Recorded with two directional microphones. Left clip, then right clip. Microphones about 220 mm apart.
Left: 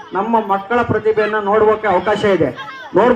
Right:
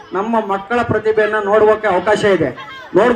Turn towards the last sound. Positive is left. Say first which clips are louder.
# even
turn(degrees=-45)  # may be behind; listen again after turning